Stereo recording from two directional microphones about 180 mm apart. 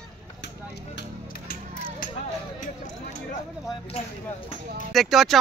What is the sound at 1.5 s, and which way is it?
Music, 50° left (ahead or behind).